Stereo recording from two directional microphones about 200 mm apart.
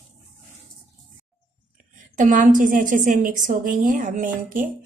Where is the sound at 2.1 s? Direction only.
40° right (ahead or behind).